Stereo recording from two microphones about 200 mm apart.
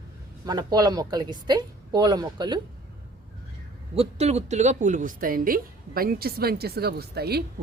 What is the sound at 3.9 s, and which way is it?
A woman's voice, 30° right (ahead or behind).